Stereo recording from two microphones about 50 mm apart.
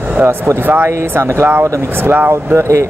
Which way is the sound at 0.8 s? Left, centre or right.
Right.